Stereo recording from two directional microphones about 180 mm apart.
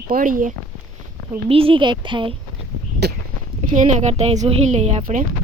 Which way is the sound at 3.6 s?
45° right (ahead or behind).